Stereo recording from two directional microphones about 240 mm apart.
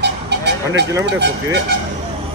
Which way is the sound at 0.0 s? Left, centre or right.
Right.